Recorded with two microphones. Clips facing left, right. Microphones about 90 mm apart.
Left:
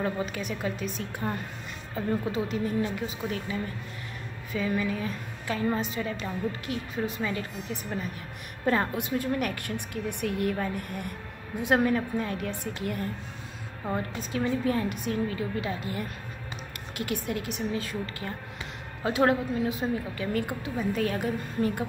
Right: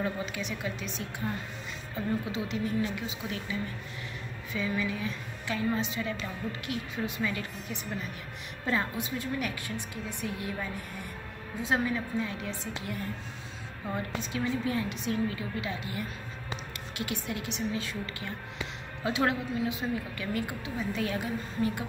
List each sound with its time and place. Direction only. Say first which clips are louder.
0.0 s a woman's voice: left 3 dB; 45° left (ahead or behind)
8.6 s a woman's voice: left 5 dB; 55° left (ahead or behind)
14.3 s a woman's voice: left 4 dB; 40° left (ahead or behind)